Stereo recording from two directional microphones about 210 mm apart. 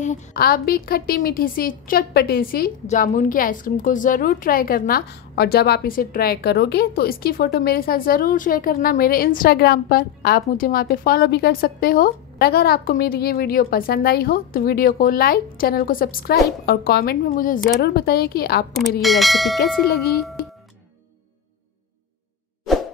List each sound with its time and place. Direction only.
0.0 s a woman's voice: 40° left (ahead or behind)
18.8 s speech: centre (ahead or behind)
19.9 s a woman's voice: 50° left (ahead or behind)